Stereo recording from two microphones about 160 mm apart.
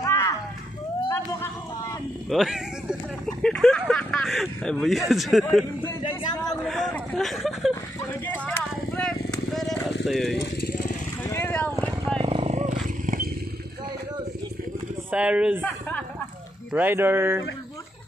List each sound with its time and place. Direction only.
0.0 s a sound: 20° left (ahead or behind)
2.2 s speech: centre (ahead or behind)
6.6 s a sound: centre (ahead or behind)
8.3 s clip-clop: 10° left (ahead or behind)
9.3 s vehicle: centre (ahead or behind)
10.0 s speech: centre (ahead or behind)
10.4 s vehicle: 80° left
11.2 s vehicle: 15° left (ahead or behind)
12.2 s wild animals: 35° right (ahead or behind); by 13.3 s 55° right (ahead or behind)
15.0 s speech: 5° right (ahead or behind)
16.7 s speech: 15° right (ahead or behind)